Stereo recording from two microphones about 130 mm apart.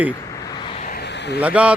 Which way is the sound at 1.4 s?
10° right (ahead or behind).